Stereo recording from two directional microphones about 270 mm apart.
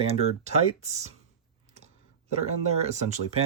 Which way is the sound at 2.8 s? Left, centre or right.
Right.